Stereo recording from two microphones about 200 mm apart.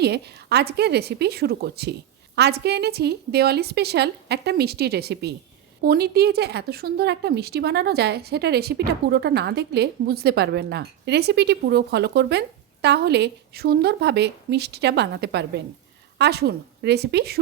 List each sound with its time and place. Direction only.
0.0 s a woman's voice: 55° right (ahead or behind)